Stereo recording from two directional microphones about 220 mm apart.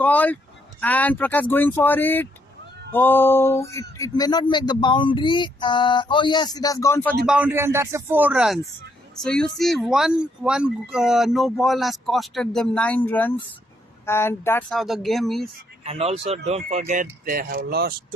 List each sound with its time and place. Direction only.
0.0 s speech: 5° left (ahead or behind)
7.3 s speech: 5° right (ahead or behind); by 14.8 s 10° left (ahead or behind)
14.8 s speech: centre (ahead or behind)
15.8 s speech: 30° right (ahead or behind); by 17.9 s 45° right (ahead or behind)